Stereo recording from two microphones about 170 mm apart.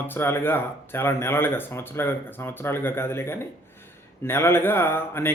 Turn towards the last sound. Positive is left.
turn(degrees=15)  # may be behind; listen again after turning